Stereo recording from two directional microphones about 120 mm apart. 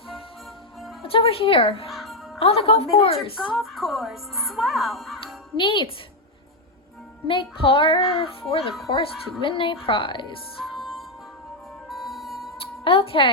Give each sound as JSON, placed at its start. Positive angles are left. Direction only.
{"t": 1.0, "sound": "a child's voice", "side_deg": 50}
{"t": 1.9, "sound": "music", "side_deg": 0}
{"t": 2.4, "sound": "speech", "side_deg": 55}
{"t": 3.5, "sound": "speech", "side_deg": 0}
{"t": 5.5, "sound": "a child's voice", "side_deg": 45}
{"t": 7.3, "sound": "a child's voice", "side_deg": 45}
{"t": 10.6, "sound": "music", "side_deg": 0}
{"t": 12.5, "sound": "a sound", "side_deg": 50}